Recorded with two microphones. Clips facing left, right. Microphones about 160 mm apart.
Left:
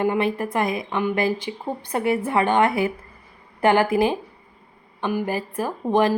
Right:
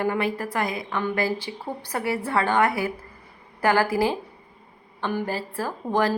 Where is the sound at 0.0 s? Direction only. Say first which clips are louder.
Left 3 dB; 20° left (ahead or behind).